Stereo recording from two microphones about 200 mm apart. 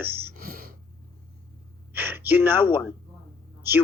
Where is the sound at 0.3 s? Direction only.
45° right (ahead or behind).